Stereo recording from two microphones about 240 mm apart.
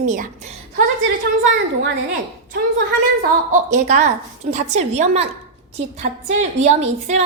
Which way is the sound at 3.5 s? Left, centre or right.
Right.